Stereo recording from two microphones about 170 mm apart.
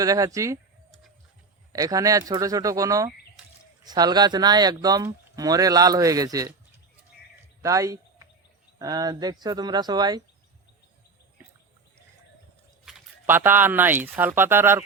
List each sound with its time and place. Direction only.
0.0 s speech: 20° right (ahead or behind)
1.7 s speech: 20° right (ahead or behind)
7.6 s speech: 20° right (ahead or behind)
12.9 s a sound: 5° right (ahead or behind)
13.2 s speech: 10° right (ahead or behind)